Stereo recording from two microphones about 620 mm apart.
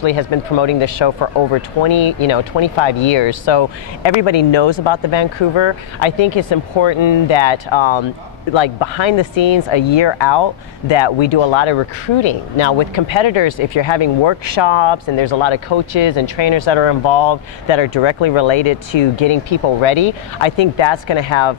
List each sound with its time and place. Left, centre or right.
0.0 s speech: left